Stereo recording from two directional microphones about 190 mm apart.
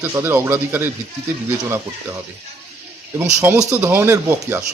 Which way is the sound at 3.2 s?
10° right (ahead or behind).